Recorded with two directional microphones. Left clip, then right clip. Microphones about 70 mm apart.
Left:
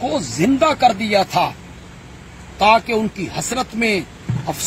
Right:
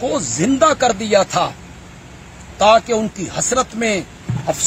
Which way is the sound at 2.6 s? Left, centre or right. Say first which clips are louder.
Right 2 dB; right.